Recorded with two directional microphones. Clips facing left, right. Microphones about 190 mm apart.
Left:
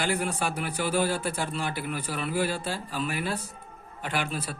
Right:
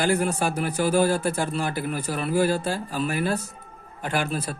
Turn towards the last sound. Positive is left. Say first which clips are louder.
# right 4 dB
turn(degrees=-45)  # may be behind; listen again after turning